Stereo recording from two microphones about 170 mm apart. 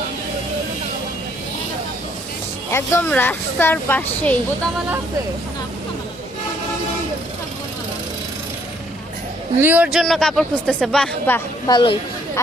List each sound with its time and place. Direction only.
2.7 s speech: 15° left (ahead or behind)
9.6 s speech: 10° right (ahead or behind); by 11.7 s 15° left (ahead or behind)
11.7 s speech: 30° left (ahead or behind)